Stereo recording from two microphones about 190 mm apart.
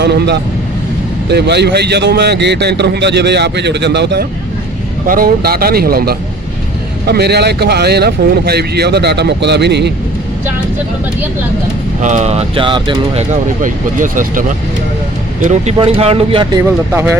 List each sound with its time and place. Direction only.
0.0 s a man's voice: 60° right (ahead or behind)
5.0 s a man's voice: 50° right (ahead or behind)
12.0 s speech: 40° right (ahead or behind)
13.6 s speech: 45° right (ahead or behind)
15.4 s speech: 35° right (ahead or behind)
16.6 s speech: 10° right (ahead or behind)